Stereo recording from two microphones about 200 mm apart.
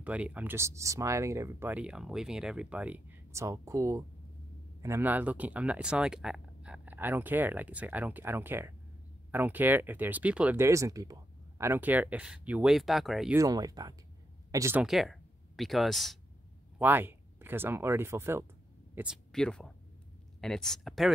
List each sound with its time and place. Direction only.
0.0 s speech: 5° right (ahead or behind)
13.4 s speech: 20° right (ahead or behind)
18.9 s speech: centre (ahead or behind)